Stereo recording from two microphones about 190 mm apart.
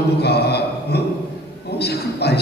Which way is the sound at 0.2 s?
60° left (ahead or behind).